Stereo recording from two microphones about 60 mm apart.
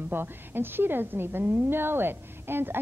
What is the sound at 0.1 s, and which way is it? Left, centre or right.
A woman's voice, right.